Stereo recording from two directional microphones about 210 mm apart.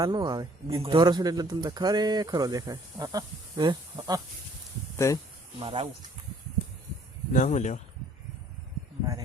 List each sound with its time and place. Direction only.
0.0 s speech: 20° right (ahead or behind)
4.9 s speech: 15° left (ahead or behind)
5.5 s speech: 25° right (ahead or behind)
7.3 s speech: 35° left (ahead or behind)